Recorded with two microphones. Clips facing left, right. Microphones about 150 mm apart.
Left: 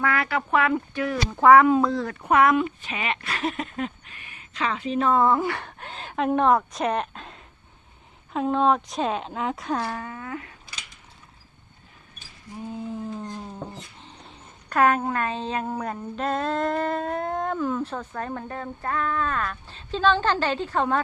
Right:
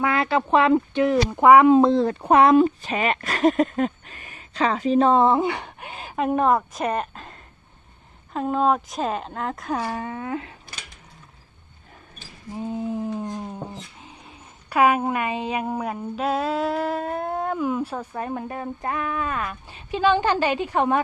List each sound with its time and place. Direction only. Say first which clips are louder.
0.0 s speech: right 4 dB; 25° right (ahead or behind)
10.0 s speech: right 5 dB; 25° right (ahead or behind)
12.5 s a sound: right 5 dB; 20° right (ahead or behind)